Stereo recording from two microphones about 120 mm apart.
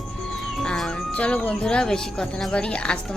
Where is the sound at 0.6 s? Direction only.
5° left (ahead or behind).